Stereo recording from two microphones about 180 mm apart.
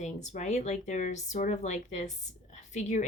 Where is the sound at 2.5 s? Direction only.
40° left (ahead or behind).